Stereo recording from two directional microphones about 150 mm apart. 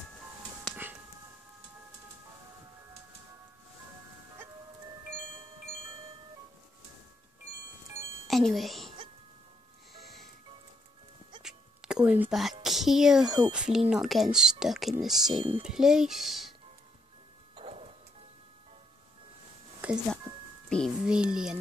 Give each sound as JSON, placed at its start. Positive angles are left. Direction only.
{"t": 8.3, "sound": "speech", "side_deg": 0}
{"t": 9.9, "sound": "music", "side_deg": 0}
{"t": 11.4, "sound": "a sound", "side_deg": -5}
{"t": 12.6, "sound": "speech", "side_deg": 0}
{"t": 17.6, "sound": "music", "side_deg": -40}
{"t": 19.8, "sound": "music", "side_deg": -10}
{"t": 20.7, "sound": "speech", "side_deg": 5}
{"t": 21.1, "sound": "speech", "side_deg": -5}